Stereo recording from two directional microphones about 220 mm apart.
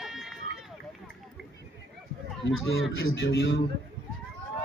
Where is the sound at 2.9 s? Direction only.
55° left (ahead or behind).